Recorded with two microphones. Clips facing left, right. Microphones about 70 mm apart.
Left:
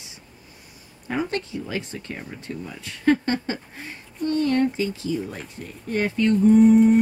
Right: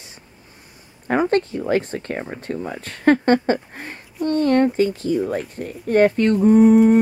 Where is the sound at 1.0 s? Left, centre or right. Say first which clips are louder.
Right 8 dB; right.